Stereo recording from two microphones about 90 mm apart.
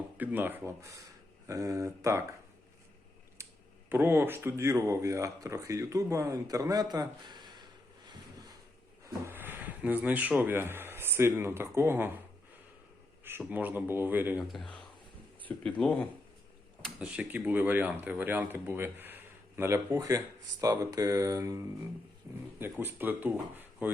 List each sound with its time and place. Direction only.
0.2 s speech: 20° right (ahead or behind)
0.8 s speech: 35° right (ahead or behind)
3.8 s speech: 25° right (ahead or behind); by 7.6 s 50° right (ahead or behind)
9.0 s speech: 25° right (ahead or behind)
13.5 s speech: 20° right (ahead or behind)
14.3 s speech: centre (ahead or behind)
15.8 s speech: 15° left (ahead or behind)
17.0 s speech: 15° right (ahead or behind); by 21.6 s 40° right (ahead or behind)
22.5 s speech: 25° right (ahead or behind)